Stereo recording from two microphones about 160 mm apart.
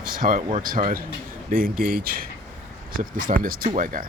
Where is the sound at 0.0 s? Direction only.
60° right (ahead or behind).